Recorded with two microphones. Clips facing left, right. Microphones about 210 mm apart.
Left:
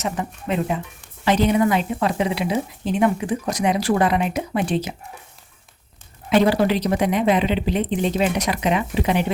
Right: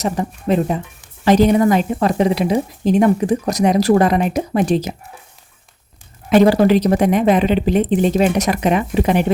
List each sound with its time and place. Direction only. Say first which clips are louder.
0.0 s a woman's voice: right 6 dB; 40° right (ahead or behind)
6.3 s a woman's voice: right 6 dB; 45° right (ahead or behind)